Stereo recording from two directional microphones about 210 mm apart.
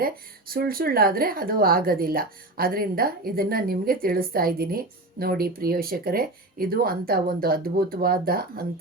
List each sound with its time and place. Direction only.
0.0 s speech: 45° right (ahead or behind)